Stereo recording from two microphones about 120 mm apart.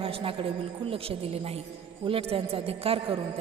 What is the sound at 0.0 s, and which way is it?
A woman's voice, 50° right (ahead or behind).